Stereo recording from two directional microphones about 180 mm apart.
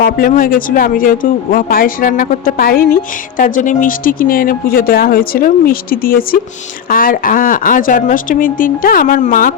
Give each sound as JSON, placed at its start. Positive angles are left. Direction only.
{"t": 0.0, "sound": "speech", "side_deg": 50}